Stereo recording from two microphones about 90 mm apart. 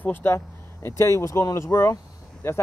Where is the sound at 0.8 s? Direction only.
35° left (ahead or behind).